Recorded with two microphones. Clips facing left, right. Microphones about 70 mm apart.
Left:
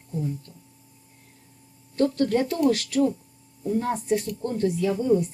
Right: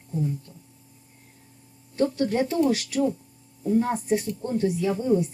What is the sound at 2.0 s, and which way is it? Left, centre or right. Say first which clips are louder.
A woman's voice: left 1 dB; centre.